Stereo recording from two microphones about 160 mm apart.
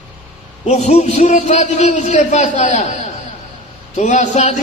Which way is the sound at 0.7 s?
45° left (ahead or behind).